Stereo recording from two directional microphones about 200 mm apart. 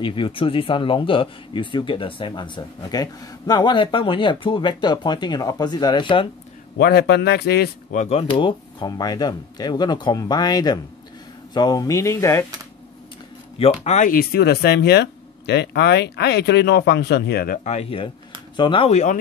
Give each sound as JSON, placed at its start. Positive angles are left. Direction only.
{"t": 0.0, "sound": "speech", "side_deg": 25}
{"t": 6.8, "sound": "speech", "side_deg": 50}
{"t": 8.0, "sound": "speech", "side_deg": 30}
{"t": 13.6, "sound": "speech", "side_deg": 30}
{"t": 17.6, "sound": "speech", "side_deg": 30}